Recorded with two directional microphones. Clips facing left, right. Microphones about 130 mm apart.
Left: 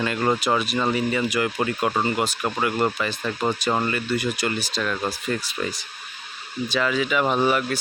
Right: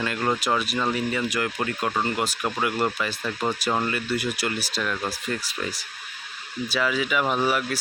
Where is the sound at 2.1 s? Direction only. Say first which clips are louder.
Left 2 dB; centre (ahead or behind).